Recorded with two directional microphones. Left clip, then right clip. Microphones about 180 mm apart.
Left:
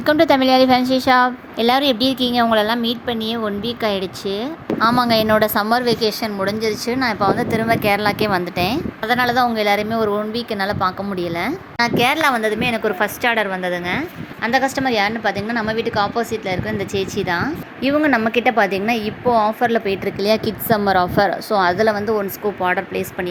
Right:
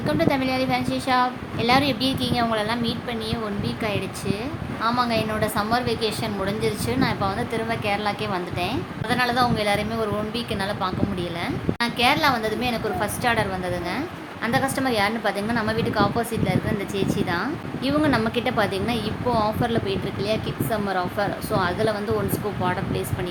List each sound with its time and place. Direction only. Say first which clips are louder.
0.0 s a woman's voice: left 8 dB; 45° left (ahead or behind)
4.8 s a woman's voice: left 7 dB; 50° left (ahead or behind); by 19.8 s 30° left (ahead or behind)
20.2 s a woman's voice: left 9 dB; 45° left (ahead or behind)